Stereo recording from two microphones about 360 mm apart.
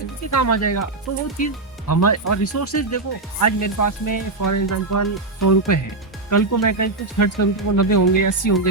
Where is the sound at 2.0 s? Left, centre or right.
Left.